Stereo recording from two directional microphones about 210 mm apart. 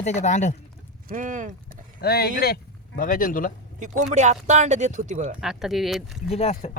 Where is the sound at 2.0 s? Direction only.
50° left (ahead or behind).